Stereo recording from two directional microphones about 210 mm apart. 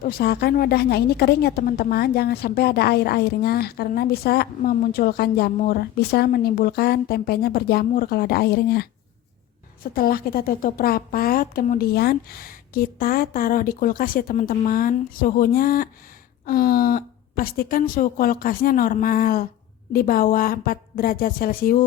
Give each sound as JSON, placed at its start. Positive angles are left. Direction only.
{"t": 0.0, "sound": "a woman's voice", "side_deg": 45}